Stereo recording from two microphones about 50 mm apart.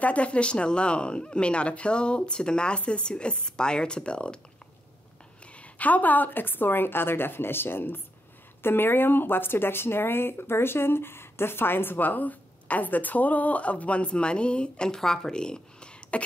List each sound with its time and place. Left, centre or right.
0.0 s speech: left
5.6 s a woman's voice: left